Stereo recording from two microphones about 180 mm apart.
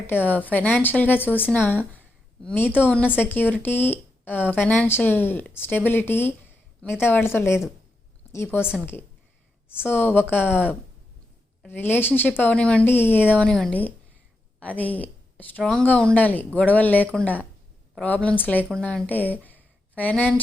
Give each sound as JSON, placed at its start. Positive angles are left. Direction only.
{"t": 0.1, "sound": "a woman's voice", "side_deg": 10}
{"t": 9.8, "sound": "a woman's voice", "side_deg": 10}